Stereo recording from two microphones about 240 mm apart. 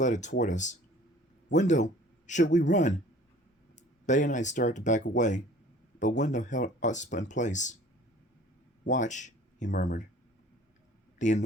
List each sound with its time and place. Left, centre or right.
0.0 s speech: left
4.0 s speech: left
8.9 s speech: left
11.2 s speech: left